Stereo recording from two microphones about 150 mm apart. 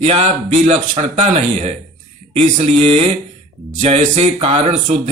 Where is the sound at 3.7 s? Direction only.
60° right (ahead or behind).